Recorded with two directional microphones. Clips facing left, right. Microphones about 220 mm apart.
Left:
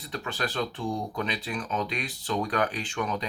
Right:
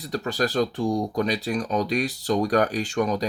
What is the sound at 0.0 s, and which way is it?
Speech, 40° right (ahead or behind).